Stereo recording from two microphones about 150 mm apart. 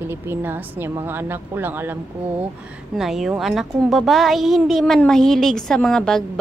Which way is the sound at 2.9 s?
5° right (ahead or behind).